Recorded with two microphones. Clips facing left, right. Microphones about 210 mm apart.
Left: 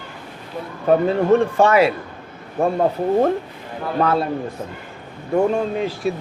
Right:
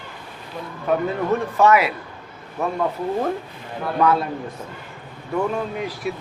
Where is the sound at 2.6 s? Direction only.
50° left (ahead or behind).